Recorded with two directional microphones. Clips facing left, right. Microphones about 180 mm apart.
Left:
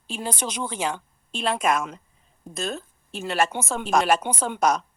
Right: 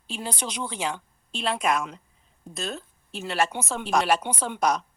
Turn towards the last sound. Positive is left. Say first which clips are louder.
# left 2 dB
turn(degrees=50)  # may be behind; listen again after turning